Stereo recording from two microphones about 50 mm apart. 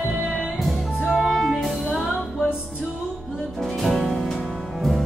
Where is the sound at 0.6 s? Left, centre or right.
Centre.